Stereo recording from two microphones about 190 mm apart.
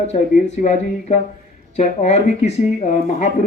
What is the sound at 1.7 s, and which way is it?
Speech, 35° left (ahead or behind).